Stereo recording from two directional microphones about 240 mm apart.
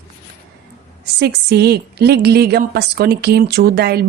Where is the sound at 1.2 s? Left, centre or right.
Right.